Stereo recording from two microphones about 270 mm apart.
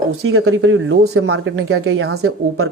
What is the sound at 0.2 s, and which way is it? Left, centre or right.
Speech, right.